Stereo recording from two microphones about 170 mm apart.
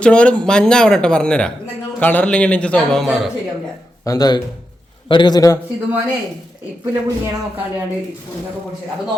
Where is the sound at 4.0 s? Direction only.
20° left (ahead or behind).